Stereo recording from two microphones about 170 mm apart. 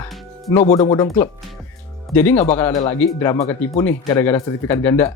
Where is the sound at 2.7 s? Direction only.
25° left (ahead or behind).